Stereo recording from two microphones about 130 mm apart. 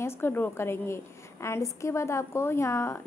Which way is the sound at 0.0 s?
15° left (ahead or behind).